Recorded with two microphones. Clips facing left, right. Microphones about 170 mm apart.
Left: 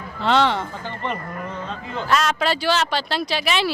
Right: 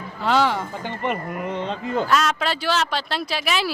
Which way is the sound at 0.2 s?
5° right (ahead or behind).